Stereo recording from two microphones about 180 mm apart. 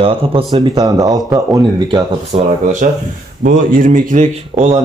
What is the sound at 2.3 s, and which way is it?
Speech, 30° right (ahead or behind).